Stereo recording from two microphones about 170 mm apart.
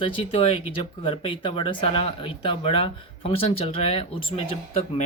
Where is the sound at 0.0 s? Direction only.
30° left (ahead or behind).